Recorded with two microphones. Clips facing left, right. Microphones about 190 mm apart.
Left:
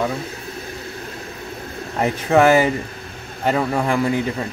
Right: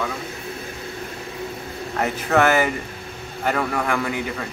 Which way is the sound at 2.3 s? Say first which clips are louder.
Left 4 dB; 30° left (ahead or behind).